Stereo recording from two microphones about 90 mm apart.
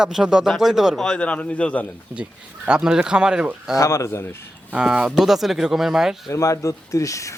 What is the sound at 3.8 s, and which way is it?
Speech, 35° left (ahead or behind).